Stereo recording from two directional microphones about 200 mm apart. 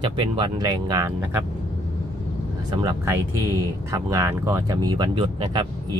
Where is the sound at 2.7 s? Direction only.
20° right (ahead or behind).